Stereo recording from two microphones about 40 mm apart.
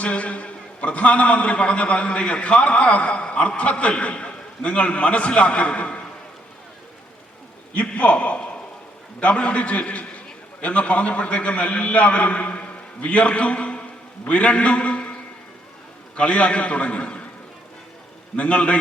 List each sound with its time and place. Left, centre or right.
0.0 s a man's voice: left
7.7 s a man's voice: left
16.1 s a man's voice: left
18.3 s a man's voice: left